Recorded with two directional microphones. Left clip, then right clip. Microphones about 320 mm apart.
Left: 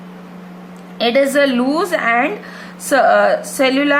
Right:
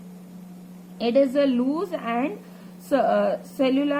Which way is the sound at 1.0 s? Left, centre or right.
Centre.